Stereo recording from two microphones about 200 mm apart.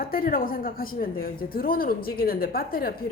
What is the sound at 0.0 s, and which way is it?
A woman's voice, 45° left (ahead or behind).